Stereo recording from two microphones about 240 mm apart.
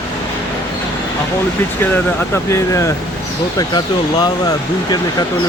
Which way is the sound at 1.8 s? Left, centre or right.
Centre.